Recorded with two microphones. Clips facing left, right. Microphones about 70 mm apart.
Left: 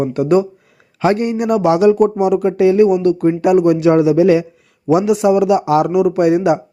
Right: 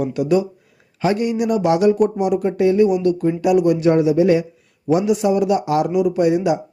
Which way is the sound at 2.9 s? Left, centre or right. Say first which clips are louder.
Left 4 dB; left.